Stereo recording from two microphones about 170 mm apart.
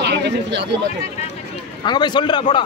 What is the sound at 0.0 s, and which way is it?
Speech, 80° right.